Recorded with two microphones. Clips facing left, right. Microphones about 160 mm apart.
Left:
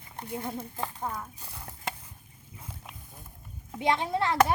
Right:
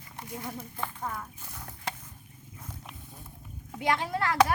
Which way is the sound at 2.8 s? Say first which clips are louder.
Right 1 dB; 5° left (ahead or behind).